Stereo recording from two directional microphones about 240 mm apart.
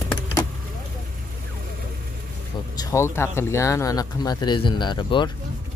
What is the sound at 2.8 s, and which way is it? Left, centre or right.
Speech, centre.